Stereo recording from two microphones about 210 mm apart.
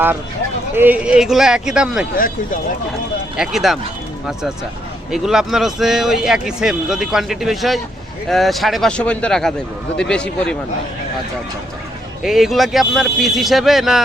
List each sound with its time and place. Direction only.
0.8 s speech: 5° right (ahead or behind)
2.1 s speech: 40° left (ahead or behind)
3.3 s speech: centre (ahead or behind)
5.1 s speech: centre (ahead or behind)
12.2 s speech: centre (ahead or behind)